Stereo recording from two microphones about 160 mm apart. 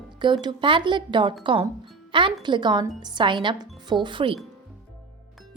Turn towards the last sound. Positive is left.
turn(degrees=-30)  # may be behind; listen again after turning